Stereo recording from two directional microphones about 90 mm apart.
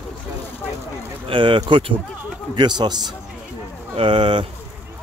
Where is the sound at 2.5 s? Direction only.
55° right (ahead or behind).